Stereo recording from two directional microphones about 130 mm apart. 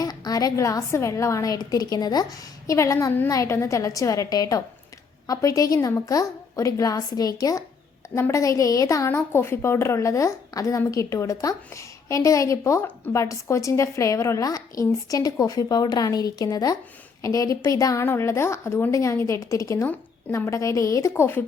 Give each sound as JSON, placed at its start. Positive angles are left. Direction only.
{"t": 0.0, "sound": "a woman's voice", "side_deg": 30}